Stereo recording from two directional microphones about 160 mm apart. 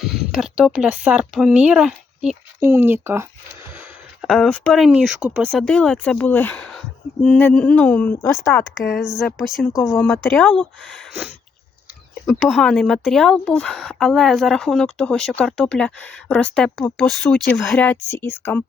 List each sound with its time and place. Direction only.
0.3 s speech: 5° right (ahead or behind)
2.6 s speech: 15° right (ahead or behind)
4.2 s speech: centre (ahead or behind); by 8.6 s 15° left (ahead or behind)
8.8 s speech: centre (ahead or behind)
9.7 s speech: 20° left (ahead or behind)
10.0 s speech: 5° left (ahead or behind)